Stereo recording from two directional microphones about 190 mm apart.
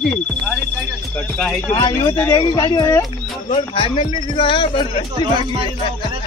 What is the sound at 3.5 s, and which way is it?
Speech, 30° left (ahead or behind).